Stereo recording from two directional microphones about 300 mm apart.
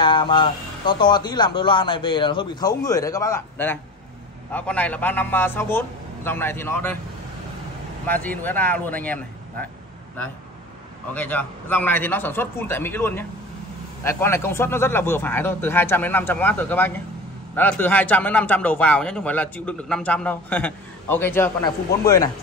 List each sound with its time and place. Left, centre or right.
0.0 s a man's voice: centre
8.1 s speech: centre
11.1 s a man's voice: centre